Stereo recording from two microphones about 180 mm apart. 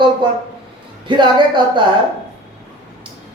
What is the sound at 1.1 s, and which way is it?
Speech, 25° right (ahead or behind).